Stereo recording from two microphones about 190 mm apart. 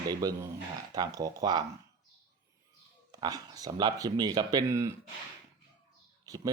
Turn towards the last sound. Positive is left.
turn(degrees=-20)  # may be behind; listen again after turning